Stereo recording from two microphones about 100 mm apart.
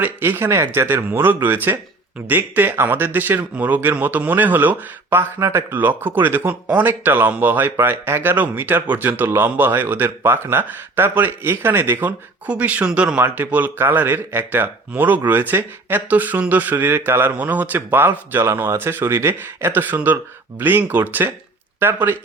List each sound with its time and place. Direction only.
0.0 s speech: 20° right (ahead or behind)